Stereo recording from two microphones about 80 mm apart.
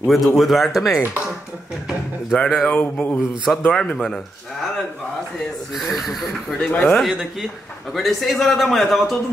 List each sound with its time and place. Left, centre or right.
0.0 s a man's voice: centre
2.3 s speech: centre
3.4 s speech: centre
5.8 s a man's voice: centre
6.6 s speech: centre
7.9 s a man's voice: centre